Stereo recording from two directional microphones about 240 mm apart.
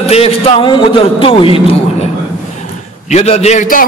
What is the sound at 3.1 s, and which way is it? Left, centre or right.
Speech, left.